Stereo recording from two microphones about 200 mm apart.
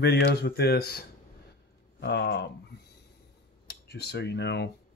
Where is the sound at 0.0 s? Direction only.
55° left (ahead or behind).